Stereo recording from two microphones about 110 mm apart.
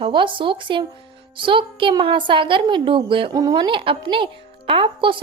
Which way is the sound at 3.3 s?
35° right (ahead or behind).